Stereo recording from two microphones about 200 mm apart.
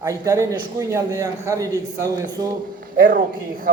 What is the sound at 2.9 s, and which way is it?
Speech, 45° right (ahead or behind).